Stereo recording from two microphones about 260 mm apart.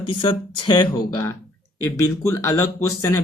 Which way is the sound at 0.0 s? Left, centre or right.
Centre.